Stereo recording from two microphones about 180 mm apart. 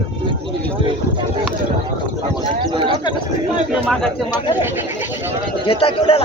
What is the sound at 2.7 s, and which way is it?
Chatter, 25° right (ahead or behind).